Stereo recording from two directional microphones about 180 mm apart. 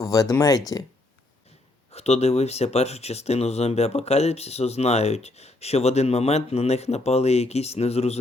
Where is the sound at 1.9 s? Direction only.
35° left (ahead or behind).